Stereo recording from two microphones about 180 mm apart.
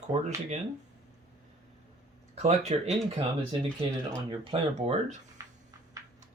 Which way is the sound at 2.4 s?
35° right (ahead or behind).